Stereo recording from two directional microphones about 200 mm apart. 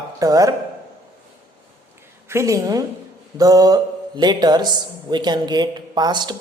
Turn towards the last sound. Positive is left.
turn(degrees=-20)  # may be behind; listen again after turning